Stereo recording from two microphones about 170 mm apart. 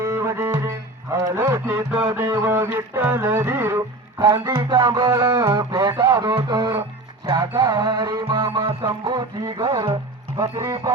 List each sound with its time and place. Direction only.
0.0 s music: 15° right (ahead or behind)
1.1 s speech: 15° right (ahead or behind)
2.1 s music: 15° right (ahead or behind)
10.6 s speech: 15° right (ahead or behind)